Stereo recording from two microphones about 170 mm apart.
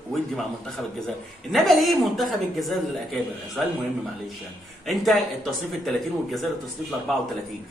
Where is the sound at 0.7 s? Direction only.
Centre (ahead or behind).